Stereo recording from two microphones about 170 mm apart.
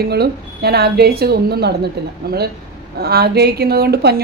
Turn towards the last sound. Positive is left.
turn(degrees=-70)  # may be behind; listen again after turning